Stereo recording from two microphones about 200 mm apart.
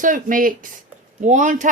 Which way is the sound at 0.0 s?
40° right (ahead or behind).